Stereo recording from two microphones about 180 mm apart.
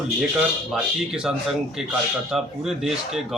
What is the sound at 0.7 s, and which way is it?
Speech, 5° right (ahead or behind).